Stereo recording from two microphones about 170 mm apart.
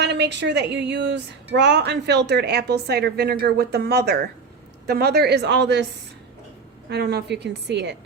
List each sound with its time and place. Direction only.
0.0 s a woman's voice: 85° right
6.9 s a woman's voice: 75° right (ahead or behind)